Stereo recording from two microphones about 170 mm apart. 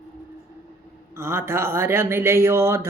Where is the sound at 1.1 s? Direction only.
15° right (ahead or behind).